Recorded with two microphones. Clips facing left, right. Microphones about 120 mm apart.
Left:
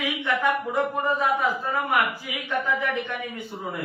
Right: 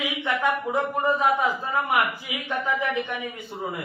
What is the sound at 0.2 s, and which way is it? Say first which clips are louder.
Speech: even; 15° right (ahead or behind).